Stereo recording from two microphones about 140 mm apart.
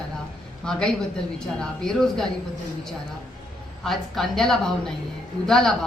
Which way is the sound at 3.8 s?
Centre (ahead or behind).